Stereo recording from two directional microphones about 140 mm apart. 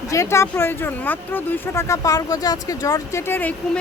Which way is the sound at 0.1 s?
20° left (ahead or behind).